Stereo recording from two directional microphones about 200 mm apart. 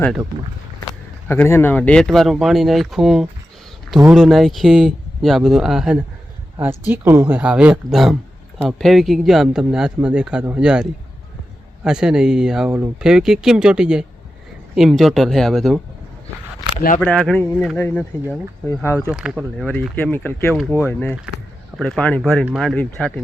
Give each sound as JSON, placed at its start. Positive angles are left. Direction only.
{"t": 1.3, "sound": "a man's voice", "side_deg": 10}
{"t": 12.6, "sound": "speech", "side_deg": -15}
{"t": 13.0, "sound": "a man's voice", "side_deg": -5}
{"t": 17.0, "sound": "a man's voice", "side_deg": 5}
{"t": 19.0, "sound": "a man's voice", "side_deg": -5}
{"t": 19.6, "sound": "a man's voice", "side_deg": 10}